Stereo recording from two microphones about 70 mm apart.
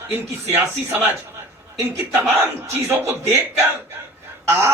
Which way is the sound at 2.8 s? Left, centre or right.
Right.